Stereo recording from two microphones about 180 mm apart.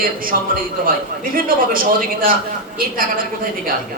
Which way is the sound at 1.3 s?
50° right (ahead or behind).